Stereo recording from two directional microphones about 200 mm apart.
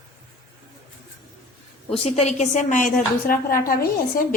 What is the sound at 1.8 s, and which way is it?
A woman's voice, 30° left (ahead or behind).